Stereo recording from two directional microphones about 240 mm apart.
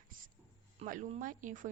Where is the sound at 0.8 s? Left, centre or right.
Right.